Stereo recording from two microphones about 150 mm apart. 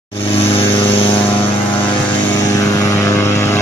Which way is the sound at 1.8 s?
35° left (ahead or behind).